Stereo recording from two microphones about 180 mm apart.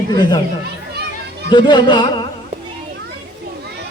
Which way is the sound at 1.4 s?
25° left (ahead or behind).